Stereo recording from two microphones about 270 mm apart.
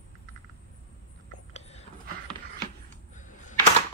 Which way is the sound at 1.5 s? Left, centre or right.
Left.